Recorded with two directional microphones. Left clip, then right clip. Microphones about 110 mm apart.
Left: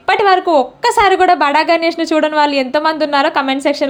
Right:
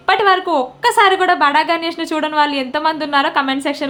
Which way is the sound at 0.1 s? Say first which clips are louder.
Left 3 dB; 35° left (ahead or behind).